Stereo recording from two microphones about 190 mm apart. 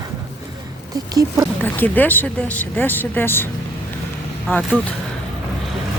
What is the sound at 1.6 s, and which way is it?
Speech, 10° left (ahead or behind).